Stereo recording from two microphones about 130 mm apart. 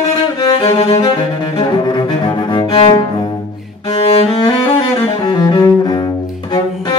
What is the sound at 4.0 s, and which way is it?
Cello, 45° left (ahead or behind).